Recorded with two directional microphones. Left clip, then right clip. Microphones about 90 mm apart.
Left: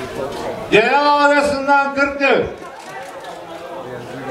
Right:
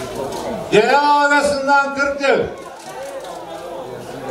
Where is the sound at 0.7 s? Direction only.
50° left (ahead or behind).